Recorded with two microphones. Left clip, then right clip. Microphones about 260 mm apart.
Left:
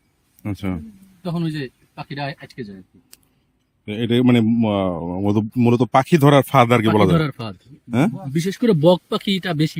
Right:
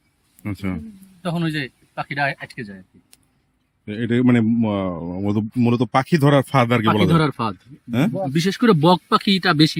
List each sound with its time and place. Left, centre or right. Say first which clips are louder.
0.4 s a man's voice: left 1 dB; centre
3.8 s a man's voice: left 1 dB; centre
7.1 s speech: right 2 dB; centre
7.9 s a man's voice: left 2 dB; centre
8.3 s speech: right 2 dB; centre